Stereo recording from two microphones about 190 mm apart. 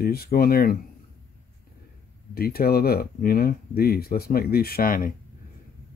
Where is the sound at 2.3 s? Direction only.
50° left (ahead or behind).